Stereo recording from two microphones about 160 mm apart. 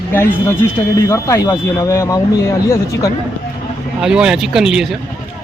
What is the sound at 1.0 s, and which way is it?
Speech, 20° left (ahead or behind).